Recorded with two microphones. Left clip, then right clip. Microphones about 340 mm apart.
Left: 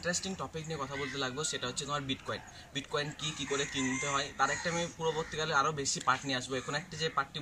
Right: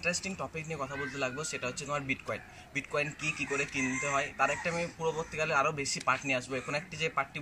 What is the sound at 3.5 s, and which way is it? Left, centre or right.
Speech, centre.